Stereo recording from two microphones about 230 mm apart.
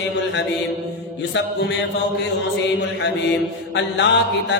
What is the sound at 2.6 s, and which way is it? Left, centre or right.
Mantra, left.